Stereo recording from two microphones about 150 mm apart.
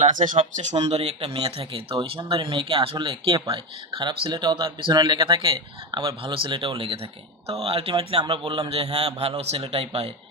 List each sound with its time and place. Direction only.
0.0 s speech: 60° right (ahead or behind); by 10.1 s 40° right (ahead or behind)